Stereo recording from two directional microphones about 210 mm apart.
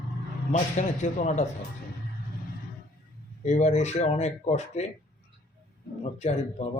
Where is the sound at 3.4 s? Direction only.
35° left (ahead or behind).